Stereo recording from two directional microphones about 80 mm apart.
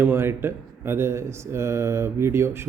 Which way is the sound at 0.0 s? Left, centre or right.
Right.